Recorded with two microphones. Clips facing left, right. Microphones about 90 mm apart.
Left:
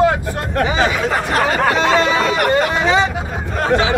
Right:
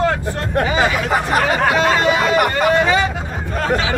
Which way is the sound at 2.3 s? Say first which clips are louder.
Even; 5° right (ahead or behind).